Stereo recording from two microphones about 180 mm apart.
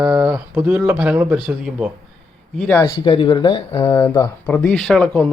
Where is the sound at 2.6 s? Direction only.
15° left (ahead or behind).